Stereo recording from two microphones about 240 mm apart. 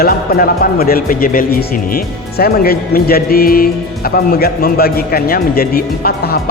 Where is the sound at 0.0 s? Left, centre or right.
Left.